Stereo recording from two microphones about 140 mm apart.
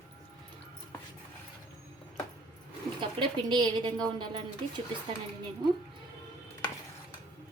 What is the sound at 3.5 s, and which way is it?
A woman's voice, 30° right (ahead or behind).